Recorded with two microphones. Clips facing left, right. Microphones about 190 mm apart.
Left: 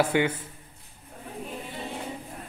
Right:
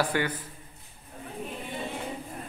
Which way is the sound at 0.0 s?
25° left (ahead or behind).